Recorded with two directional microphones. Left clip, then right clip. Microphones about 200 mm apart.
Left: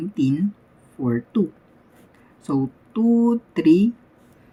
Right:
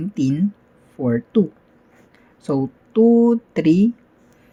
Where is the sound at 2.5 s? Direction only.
30° right (ahead or behind).